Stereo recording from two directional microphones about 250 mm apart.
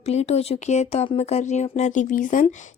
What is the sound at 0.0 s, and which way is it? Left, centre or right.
Speech, left.